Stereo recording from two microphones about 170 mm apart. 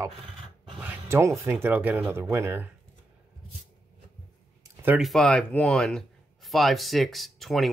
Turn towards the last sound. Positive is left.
turn(degrees=0)  # may be behind; listen again after turning